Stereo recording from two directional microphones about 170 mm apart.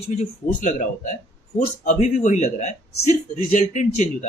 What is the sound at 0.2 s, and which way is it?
Speech, 50° left (ahead or behind).